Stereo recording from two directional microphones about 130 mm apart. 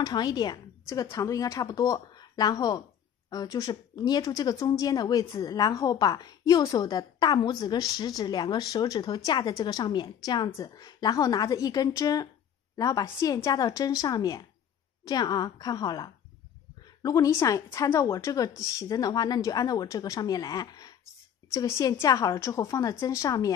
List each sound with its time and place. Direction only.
0.0 s a woman's voice: 30° left (ahead or behind)